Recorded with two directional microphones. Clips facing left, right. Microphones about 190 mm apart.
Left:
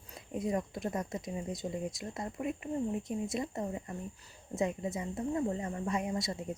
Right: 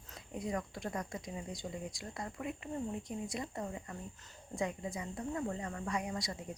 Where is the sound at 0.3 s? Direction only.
25° left (ahead or behind).